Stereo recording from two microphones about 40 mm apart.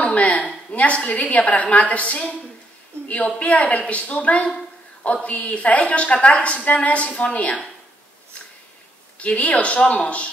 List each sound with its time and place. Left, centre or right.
0.0 s a sound: left
0.7 s a woman's voice: left
3.3 s a woman's voice: left
9.2 s a woman's voice: left